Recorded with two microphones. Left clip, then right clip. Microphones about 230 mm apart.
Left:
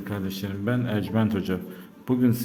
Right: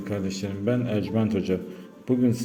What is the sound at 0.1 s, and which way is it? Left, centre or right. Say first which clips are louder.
A man's voice: right 2 dB; centre.